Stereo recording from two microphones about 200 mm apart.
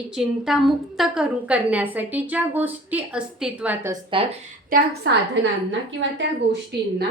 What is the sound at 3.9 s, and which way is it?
Speech, 25° right (ahead or behind).